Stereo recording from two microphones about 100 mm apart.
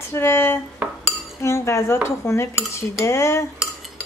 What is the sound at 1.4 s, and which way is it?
Cutlery, 25° left (ahead or behind).